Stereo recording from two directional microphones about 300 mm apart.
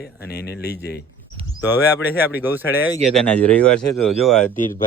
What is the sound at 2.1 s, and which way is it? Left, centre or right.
Speech, centre.